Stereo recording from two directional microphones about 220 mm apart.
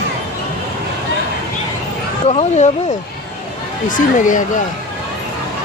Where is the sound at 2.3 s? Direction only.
30° left (ahead or behind).